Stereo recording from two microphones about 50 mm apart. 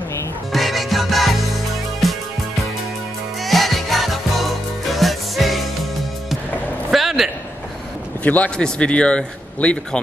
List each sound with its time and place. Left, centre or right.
0.5 s music: centre
3.4 s music: centre
6.9 s a sound: centre
8.2 s a man's voice: left
8.6 s speech: centre